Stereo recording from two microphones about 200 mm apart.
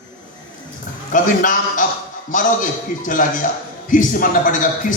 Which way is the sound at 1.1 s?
40° left (ahead or behind).